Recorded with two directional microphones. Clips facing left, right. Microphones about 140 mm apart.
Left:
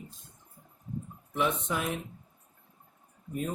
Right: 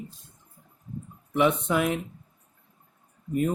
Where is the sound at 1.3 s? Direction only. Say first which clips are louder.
Right 7 dB; 70° right (ahead or behind).